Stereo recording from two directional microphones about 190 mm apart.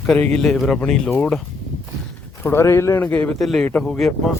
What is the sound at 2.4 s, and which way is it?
Speech, 10° left (ahead or behind).